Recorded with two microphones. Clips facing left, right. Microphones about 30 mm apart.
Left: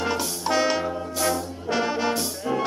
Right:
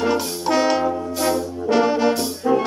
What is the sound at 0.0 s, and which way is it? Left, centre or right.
Music, centre.